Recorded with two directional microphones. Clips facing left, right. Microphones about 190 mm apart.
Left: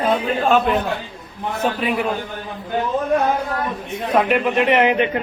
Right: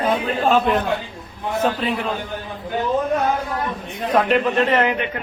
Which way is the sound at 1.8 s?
10° left (ahead or behind).